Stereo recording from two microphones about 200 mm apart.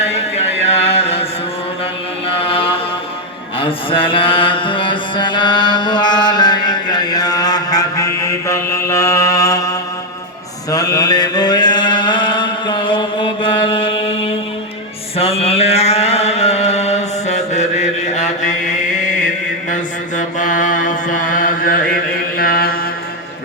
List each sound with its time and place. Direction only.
0.1 s a sound: 30° left (ahead or behind)
2.2 s chant: 30° left (ahead or behind)
3.6 s mantra: 25° left (ahead or behind)
19.7 s mantra: 40° left (ahead or behind)